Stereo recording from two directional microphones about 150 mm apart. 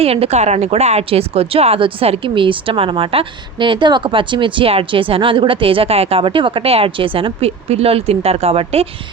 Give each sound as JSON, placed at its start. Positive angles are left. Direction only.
{"t": 0.0, "sound": "speech", "side_deg": -40}